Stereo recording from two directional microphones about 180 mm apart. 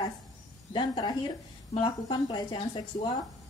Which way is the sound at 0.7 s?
25° left (ahead or behind).